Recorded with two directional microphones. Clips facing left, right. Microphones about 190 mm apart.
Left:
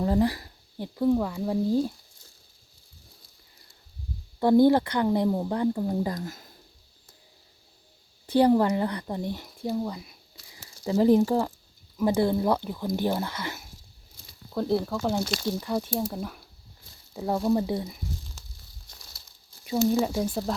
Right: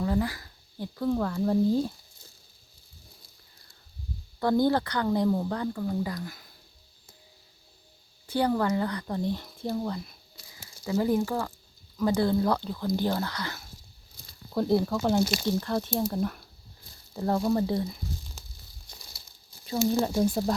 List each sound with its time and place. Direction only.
0.0 s a sound: 35° left (ahead or behind)
0.8 s speech: 15° left (ahead or behind)
4.4 s speech: 25° left (ahead or behind)
6.0 s speech: 40° left (ahead or behind)
8.3 s speech: 25° left (ahead or behind); by 10.2 s 10° left (ahead or behind)
10.5 s a sound: 30° left (ahead or behind)
11.3 s speech: 25° left (ahead or behind)
14.5 s speech: centre (ahead or behind)
15.4 s speech: 10° left (ahead or behind)
19.9 s speech: 5° left (ahead or behind)